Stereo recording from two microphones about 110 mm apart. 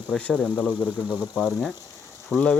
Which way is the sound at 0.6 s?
10° right (ahead or behind).